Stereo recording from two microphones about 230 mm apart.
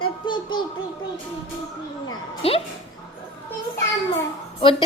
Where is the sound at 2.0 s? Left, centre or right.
Left.